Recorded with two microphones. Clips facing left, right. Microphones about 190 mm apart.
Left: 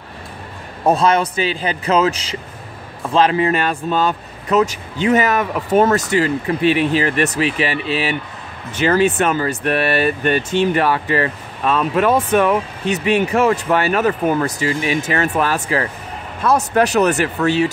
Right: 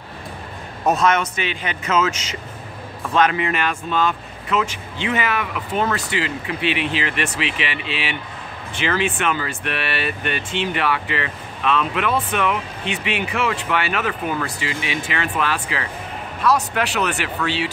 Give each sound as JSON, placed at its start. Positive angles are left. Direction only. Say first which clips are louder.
{"t": 0.8, "sound": "speech", "louder": "left 3 dB", "side_deg": 30}